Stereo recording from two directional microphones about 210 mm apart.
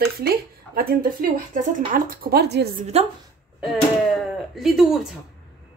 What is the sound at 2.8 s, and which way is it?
Speech, 30° right (ahead or behind).